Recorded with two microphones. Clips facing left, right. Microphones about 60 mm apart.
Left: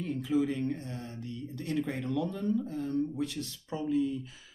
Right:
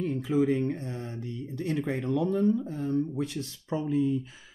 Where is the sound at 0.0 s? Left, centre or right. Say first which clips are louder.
Right 3 dB; right.